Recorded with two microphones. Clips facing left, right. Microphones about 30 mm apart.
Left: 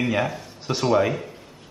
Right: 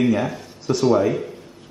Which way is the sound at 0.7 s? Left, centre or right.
Centre.